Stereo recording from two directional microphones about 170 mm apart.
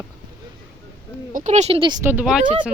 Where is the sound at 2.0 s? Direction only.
5° right (ahead or behind).